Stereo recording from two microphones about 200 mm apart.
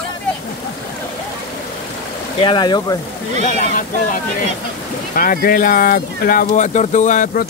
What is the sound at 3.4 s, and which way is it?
Speech, 40° left (ahead or behind).